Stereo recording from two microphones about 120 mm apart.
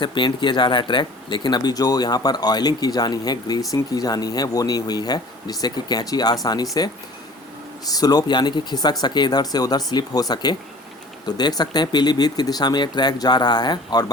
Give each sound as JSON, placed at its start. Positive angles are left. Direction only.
{"t": 0.0, "sound": "speech", "side_deg": 40}
{"t": 7.9, "sound": "speech", "side_deg": 30}